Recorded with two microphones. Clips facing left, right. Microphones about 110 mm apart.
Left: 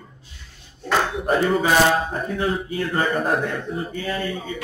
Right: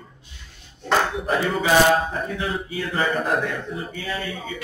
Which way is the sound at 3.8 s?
40° left (ahead or behind).